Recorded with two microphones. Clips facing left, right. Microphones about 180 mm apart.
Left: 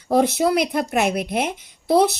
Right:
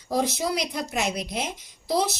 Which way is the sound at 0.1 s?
60° left (ahead or behind).